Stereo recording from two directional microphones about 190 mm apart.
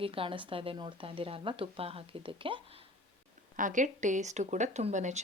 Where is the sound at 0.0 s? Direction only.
30° right (ahead or behind).